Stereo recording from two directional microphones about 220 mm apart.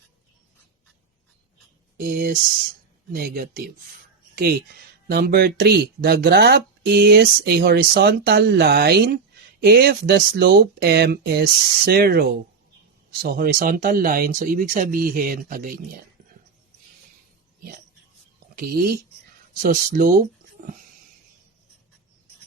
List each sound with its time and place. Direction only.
2.0 s speech: 40° right (ahead or behind)
5.0 s speech: 45° right (ahead or behind)
18.5 s speech: 40° right (ahead or behind)